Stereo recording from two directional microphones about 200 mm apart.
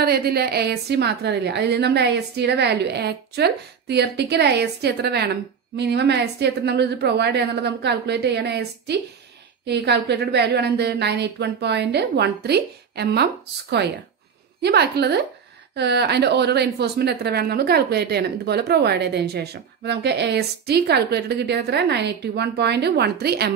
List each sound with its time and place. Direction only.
0.0 s a woman's voice: 50° right (ahead or behind)